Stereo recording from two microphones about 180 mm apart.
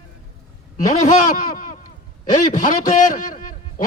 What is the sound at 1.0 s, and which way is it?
A man's voice, 45° left (ahead or behind).